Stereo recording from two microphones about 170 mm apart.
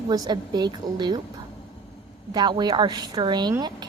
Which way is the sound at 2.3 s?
25° right (ahead or behind).